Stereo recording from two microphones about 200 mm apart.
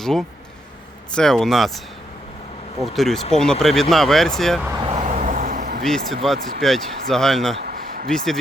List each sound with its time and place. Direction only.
0.0 s speech: centre (ahead or behind)
2.8 s speech: centre (ahead or behind)
4.9 s vehicle: 30° right (ahead or behind)
5.8 s speech: centre (ahead or behind)
7.6 s a sound: 45° right (ahead or behind)
8.1 s speech: centre (ahead or behind)